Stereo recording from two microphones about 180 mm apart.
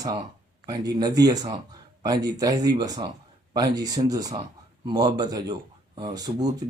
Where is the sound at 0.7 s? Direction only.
20° right (ahead or behind).